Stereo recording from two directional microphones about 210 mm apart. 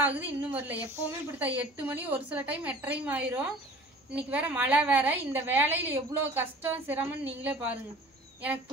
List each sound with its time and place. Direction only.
0.0 s a woman's voice: 10° right (ahead or behind)